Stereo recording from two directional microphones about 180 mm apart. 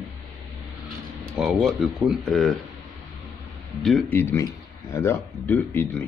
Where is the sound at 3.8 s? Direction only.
5° left (ahead or behind).